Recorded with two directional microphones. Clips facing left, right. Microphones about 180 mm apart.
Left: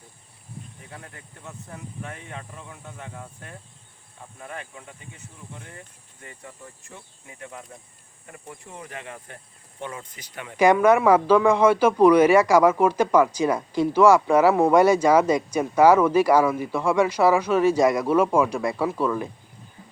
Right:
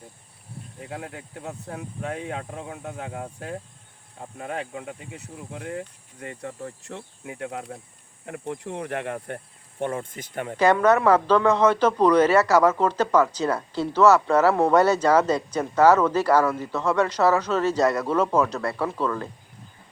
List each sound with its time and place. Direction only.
0.8 s speech: 75° right (ahead or behind)
8.3 s cricket: 70° right (ahead or behind)
9.8 s speech: 50° right (ahead or behind)
10.6 s speech: 10° left (ahead or behind)